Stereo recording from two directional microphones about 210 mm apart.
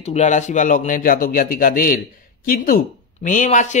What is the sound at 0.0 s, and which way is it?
Speech, 35° left (ahead or behind).